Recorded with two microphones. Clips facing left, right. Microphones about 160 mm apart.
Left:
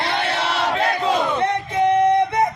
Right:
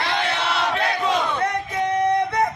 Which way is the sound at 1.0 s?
30° left (ahead or behind).